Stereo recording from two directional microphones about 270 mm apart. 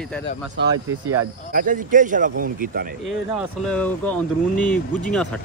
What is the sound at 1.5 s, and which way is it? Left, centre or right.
A man's voice, right.